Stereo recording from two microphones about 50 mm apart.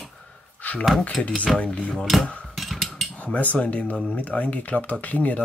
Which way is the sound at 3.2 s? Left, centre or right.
Left.